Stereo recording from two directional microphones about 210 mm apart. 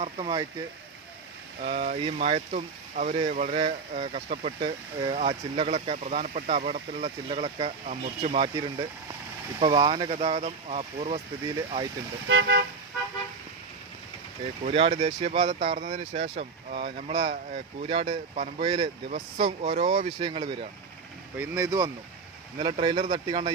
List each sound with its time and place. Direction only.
0.0 s speech: 25° right (ahead or behind)
1.6 s speech: 35° right (ahead or behind)
9.6 s speech: 20° right (ahead or behind)
12.3 s car: 60° right (ahead or behind)
14.6 s speech: 25° right (ahead or behind)